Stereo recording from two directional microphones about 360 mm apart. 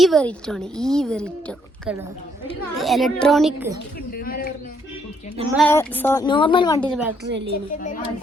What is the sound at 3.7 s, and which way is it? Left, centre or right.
Bird, left.